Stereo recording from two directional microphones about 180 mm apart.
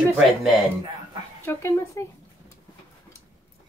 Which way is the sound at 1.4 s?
15° left (ahead or behind).